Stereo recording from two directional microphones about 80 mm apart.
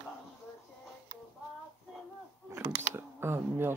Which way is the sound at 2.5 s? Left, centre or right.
Right.